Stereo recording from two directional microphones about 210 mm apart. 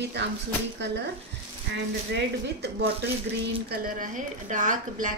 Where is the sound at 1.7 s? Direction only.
55° right (ahead or behind).